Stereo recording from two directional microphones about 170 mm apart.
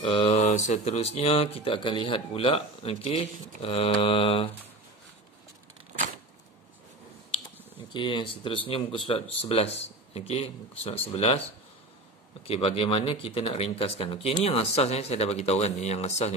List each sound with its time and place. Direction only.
0.0 s mantra: 30° left (ahead or behind)
0.4 s speech: 45° left (ahead or behind)
7.9 s speech: 30° left (ahead or behind)
12.4 s speech: 35° left (ahead or behind)